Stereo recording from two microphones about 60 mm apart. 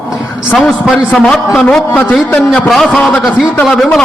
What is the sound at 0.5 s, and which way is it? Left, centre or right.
Speech, centre.